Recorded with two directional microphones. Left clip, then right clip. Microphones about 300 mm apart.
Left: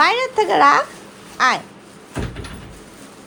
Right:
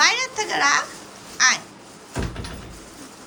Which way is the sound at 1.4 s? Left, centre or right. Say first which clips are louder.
Left 2 dB; centre.